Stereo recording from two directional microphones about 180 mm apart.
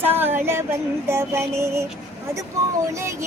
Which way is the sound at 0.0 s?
10° right (ahead or behind).